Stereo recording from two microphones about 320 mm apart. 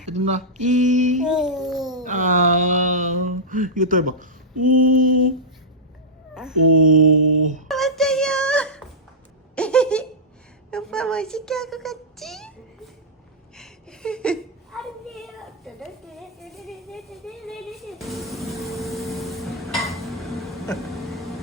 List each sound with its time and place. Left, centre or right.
0.0 s speech: right
1.2 s a child's voice: centre
2.0 s speech: right
6.7 s mantra: right
7.3 s speech: right
7.7 s a sound: centre
10.7 s a woman's voice: centre
13.6 s a sound: centre